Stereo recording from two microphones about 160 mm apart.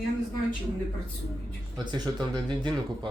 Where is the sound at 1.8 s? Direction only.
30° right (ahead or behind).